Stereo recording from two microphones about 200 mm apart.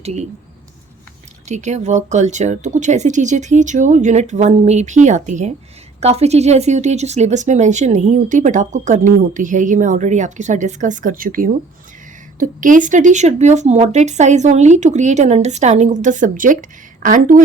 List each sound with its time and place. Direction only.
0.0 s speech: 35° right (ahead or behind)
1.5 s speech: 35° right (ahead or behind)